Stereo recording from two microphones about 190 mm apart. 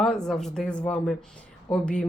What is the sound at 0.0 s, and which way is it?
A woman's voice, 5° left (ahead or behind).